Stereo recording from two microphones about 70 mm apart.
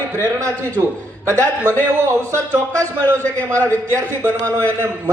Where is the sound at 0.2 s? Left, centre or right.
Right.